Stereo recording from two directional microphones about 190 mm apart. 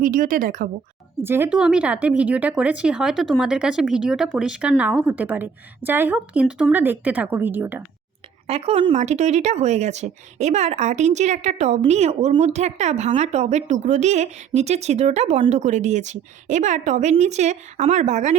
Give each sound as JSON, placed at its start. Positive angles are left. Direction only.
{"t": 0.0, "sound": "speech", "side_deg": -45}
{"t": 1.1, "sound": "speech", "side_deg": -10}
{"t": 8.4, "sound": "speech", "side_deg": -30}